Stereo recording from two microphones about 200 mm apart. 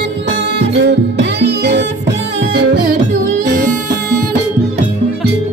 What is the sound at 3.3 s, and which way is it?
Music, 45° right (ahead or behind).